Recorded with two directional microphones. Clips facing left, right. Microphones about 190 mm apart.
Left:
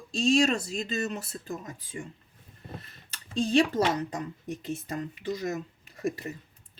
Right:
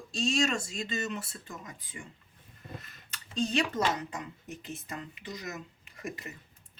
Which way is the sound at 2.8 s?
30° left (ahead or behind).